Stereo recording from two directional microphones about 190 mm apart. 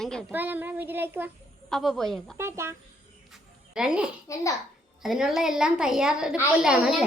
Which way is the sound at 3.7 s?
5° right (ahead or behind).